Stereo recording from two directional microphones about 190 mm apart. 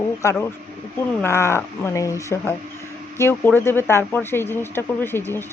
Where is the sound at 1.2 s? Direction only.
15° left (ahead or behind).